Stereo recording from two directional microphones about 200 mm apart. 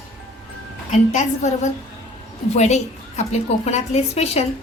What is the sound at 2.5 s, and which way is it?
A woman's voice, 35° left (ahead or behind).